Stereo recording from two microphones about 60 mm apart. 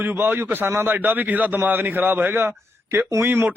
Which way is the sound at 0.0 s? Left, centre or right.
Right.